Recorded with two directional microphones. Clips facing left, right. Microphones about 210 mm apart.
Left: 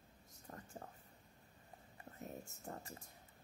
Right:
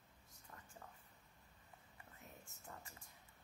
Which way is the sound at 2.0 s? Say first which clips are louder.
Left 11 dB; 40° left (ahead or behind).